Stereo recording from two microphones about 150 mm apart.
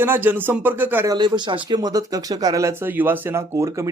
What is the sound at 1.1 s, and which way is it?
A man's voice, 30° right (ahead or behind).